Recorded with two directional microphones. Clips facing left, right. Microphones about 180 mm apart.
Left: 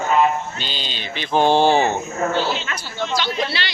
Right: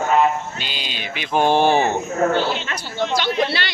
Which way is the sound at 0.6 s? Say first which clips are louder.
Left 1 dB; 5° right (ahead or behind).